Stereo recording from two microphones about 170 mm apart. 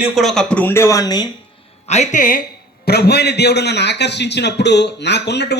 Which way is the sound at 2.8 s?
70° left (ahead or behind).